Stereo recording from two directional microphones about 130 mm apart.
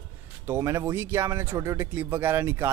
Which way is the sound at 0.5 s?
20° right (ahead or behind).